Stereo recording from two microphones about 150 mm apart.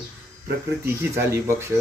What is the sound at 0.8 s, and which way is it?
Speech, 20° right (ahead or behind).